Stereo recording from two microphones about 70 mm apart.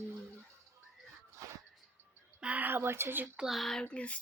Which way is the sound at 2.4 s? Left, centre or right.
Right.